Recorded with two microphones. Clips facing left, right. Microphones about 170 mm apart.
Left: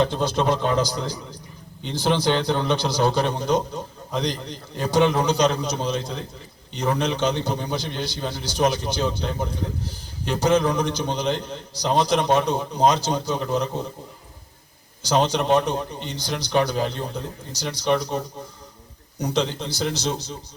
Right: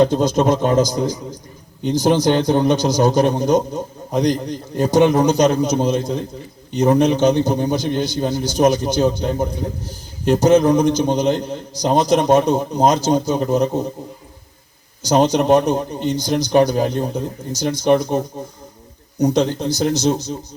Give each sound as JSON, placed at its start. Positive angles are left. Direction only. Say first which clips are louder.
{"t": 0.0, "sound": "a man's voice", "louder": "right 7 dB", "side_deg": -45}
{"t": 15.0, "sound": "a man's voice", "louder": "right 6 dB", "side_deg": -45}